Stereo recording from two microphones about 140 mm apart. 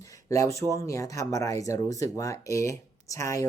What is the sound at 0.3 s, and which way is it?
Speech, 20° left (ahead or behind).